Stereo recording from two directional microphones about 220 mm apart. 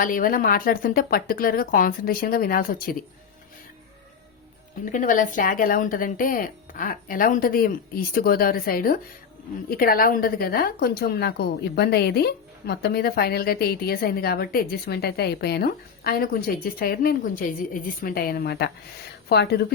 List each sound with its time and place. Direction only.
0.0 s speech: 40° left (ahead or behind)
4.9 s a woman's voice: 35° left (ahead or behind)